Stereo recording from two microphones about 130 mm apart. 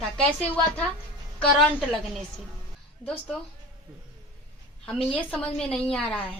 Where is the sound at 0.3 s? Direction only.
10° left (ahead or behind).